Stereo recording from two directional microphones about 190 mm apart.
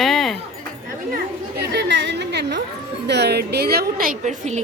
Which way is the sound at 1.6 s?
60° right (ahead or behind).